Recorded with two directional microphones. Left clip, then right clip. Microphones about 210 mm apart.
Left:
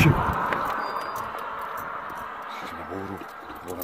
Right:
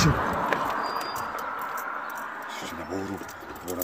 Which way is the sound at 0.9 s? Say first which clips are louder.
Even; 50° left (ahead or behind).